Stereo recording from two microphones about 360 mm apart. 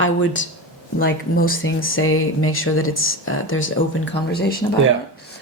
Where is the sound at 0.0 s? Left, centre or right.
Left.